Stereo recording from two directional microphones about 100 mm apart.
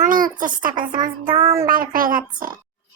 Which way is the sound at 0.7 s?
50° right (ahead or behind).